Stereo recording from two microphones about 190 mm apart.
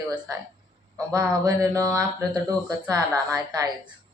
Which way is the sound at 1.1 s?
15° right (ahead or behind).